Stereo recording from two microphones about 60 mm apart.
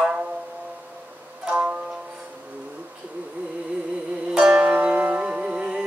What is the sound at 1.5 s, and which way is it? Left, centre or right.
Music, right.